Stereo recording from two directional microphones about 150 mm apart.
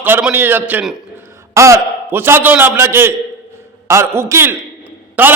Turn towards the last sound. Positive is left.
turn(degrees=-10)  # may be behind; listen again after turning